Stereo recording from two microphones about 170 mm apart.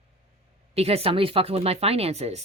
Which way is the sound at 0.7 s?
35° right (ahead or behind).